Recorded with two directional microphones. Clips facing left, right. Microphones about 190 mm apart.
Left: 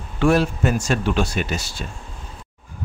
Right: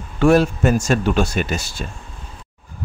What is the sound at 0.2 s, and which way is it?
A man's voice, 45° right (ahead or behind).